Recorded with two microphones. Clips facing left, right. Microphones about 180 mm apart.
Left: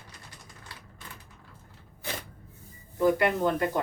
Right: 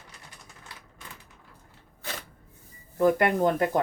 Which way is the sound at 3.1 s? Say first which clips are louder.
Right 2 dB; 50° right (ahead or behind).